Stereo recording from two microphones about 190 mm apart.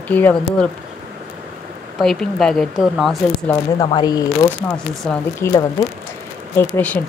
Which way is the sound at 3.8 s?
20° left (ahead or behind).